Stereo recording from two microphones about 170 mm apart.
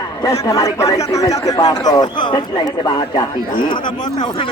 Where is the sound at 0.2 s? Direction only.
20° left (ahead or behind).